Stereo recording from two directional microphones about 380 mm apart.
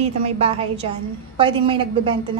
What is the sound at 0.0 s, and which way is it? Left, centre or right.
A woman's voice, centre.